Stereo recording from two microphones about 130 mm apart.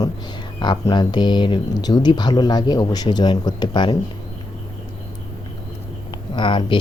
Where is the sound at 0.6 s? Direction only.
35° left (ahead or behind).